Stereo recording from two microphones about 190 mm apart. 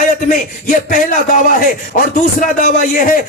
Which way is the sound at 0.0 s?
45° left (ahead or behind).